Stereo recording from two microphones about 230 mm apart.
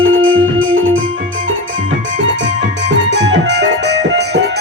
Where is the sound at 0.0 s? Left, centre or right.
Right.